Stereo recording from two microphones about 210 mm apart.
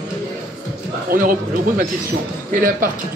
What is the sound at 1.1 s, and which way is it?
Speech, 40° right (ahead or behind).